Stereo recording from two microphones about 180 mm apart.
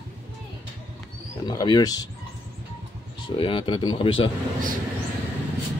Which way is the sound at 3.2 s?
30° left (ahead or behind).